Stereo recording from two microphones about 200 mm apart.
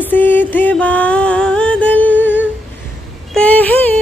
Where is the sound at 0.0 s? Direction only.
10° left (ahead or behind).